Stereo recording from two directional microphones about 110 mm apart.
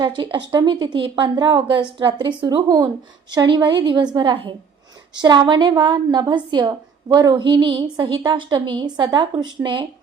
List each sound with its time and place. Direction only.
0.0 s a woman's voice: 45° right (ahead or behind)